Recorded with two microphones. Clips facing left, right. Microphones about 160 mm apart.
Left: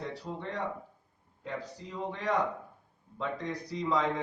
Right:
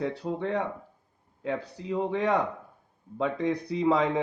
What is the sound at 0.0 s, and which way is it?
Speech, 60° right (ahead or behind).